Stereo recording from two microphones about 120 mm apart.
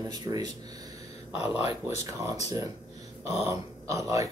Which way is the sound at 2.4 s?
30° right (ahead or behind).